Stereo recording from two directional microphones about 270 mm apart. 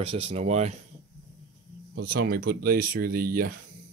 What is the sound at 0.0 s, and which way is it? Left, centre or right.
Speech, right.